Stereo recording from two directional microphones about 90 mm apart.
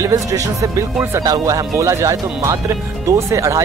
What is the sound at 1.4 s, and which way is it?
Speech, 35° right (ahead or behind).